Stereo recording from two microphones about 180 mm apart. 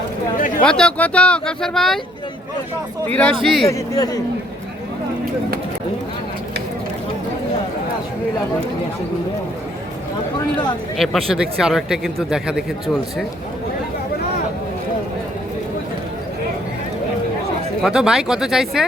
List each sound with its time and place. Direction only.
0.3 s a sound: 50° left (ahead or behind)
0.6 s speech: 5° left (ahead or behind)
3.4 s speech: centre (ahead or behind)
3.7 s speech: 20° left (ahead or behind)
10.9 s speech: centre (ahead or behind)
17.8 s speech: 5° right (ahead or behind)